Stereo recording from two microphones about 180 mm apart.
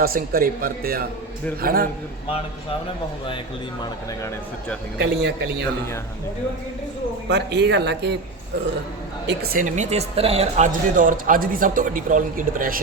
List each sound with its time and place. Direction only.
0.0 s a man's voice: 55° right (ahead or behind)
4.9 s speech: 65° right (ahead or behind)
7.3 s speech: 70° right (ahead or behind)
9.2 s speech: 60° right (ahead or behind); by 10.7 s 35° right (ahead or behind)
10.7 s speech: 50° right (ahead or behind)